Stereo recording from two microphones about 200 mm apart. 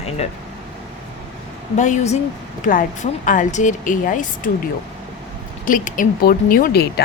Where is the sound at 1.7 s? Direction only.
35° left (ahead or behind).